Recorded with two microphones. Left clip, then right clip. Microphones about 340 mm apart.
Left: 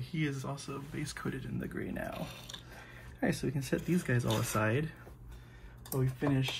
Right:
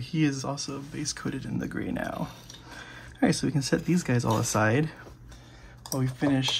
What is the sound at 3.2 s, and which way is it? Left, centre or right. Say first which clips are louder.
Speech: right 8 dB; centre.